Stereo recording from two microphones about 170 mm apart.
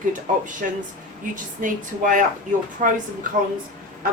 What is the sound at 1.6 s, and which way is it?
Speech, 50° right (ahead or behind).